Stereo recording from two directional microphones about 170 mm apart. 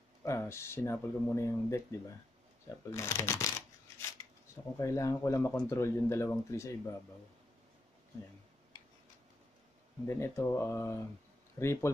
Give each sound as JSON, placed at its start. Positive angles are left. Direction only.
{"t": 0.2, "sound": "speech", "side_deg": 15}
{"t": 4.7, "sound": "speech", "side_deg": 20}
{"t": 10.0, "sound": "speech", "side_deg": 15}